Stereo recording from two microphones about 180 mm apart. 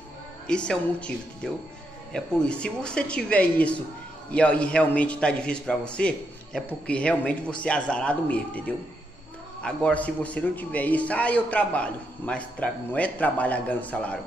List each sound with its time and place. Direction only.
0.5 s a woman's voice: 5° left (ahead or behind)